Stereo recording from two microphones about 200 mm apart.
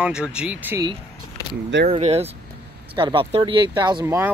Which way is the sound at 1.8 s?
35° right (ahead or behind).